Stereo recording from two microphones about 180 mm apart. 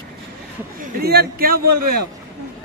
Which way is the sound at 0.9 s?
60° right (ahead or behind).